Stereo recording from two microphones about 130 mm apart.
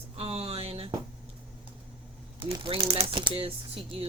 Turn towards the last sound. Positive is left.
turn(degrees=-45)  # may be behind; listen again after turning